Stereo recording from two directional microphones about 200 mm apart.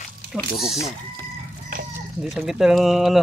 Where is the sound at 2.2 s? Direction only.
Centre (ahead or behind).